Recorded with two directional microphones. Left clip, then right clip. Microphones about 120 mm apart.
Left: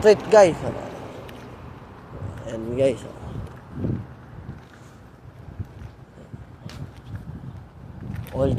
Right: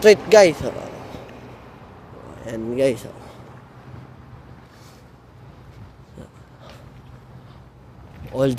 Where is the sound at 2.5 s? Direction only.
55° right (ahead or behind).